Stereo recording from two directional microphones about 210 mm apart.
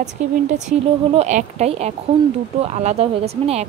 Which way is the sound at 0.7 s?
35° right (ahead or behind).